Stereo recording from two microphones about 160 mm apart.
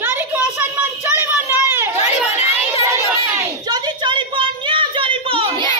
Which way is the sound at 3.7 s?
30° right (ahead or behind).